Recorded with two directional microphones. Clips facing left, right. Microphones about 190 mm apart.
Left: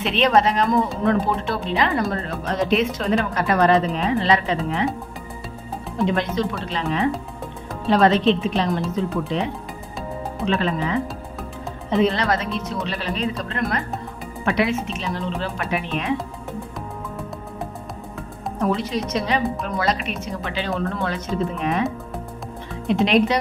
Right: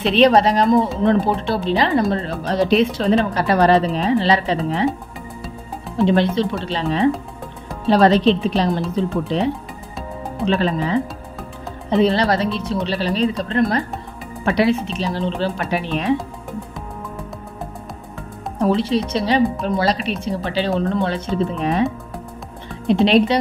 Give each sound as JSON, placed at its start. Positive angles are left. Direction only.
{"t": 0.0, "sound": "speech", "side_deg": -35}
{"t": 6.0, "sound": "speech", "side_deg": -30}
{"t": 18.6, "sound": "speech", "side_deg": -30}
{"t": 22.8, "sound": "speech", "side_deg": -30}